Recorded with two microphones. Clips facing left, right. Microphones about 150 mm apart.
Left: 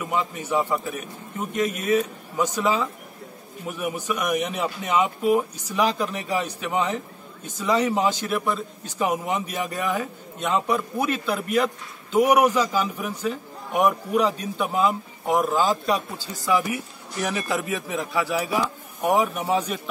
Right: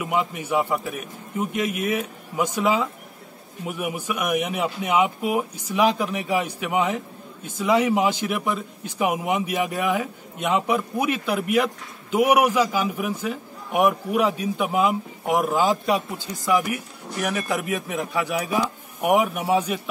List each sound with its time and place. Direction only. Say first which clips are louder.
0.0 s a man's voice: right 2 dB; 10° right (ahead or behind)
17.5 s a man's voice: right 1 dB; 15° right (ahead or behind)